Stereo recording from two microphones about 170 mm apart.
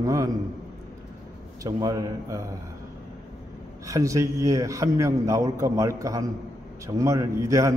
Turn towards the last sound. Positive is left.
turn(degrees=-20)  # may be behind; listen again after turning